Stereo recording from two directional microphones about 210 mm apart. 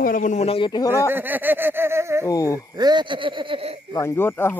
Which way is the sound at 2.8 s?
20° right (ahead or behind).